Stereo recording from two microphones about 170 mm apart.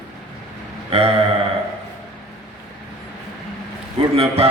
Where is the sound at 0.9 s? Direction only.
35° right (ahead or behind).